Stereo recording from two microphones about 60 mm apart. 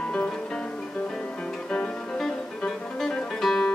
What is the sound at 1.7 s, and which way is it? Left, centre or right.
Music, centre.